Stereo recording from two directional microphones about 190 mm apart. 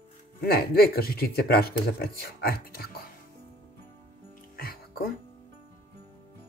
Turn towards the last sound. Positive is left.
turn(degrees=50)  # may be behind; listen again after turning